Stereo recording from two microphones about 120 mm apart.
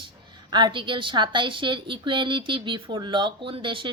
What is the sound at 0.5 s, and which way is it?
A woman's voice, 40° right (ahead or behind).